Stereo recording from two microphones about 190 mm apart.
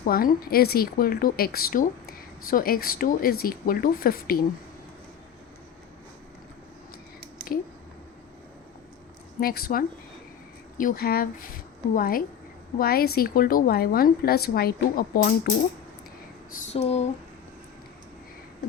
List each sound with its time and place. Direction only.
0.0 s speech: 50° left (ahead or behind)
9.4 s speech: 50° left (ahead or behind)
16.6 s a sound: 35° left (ahead or behind)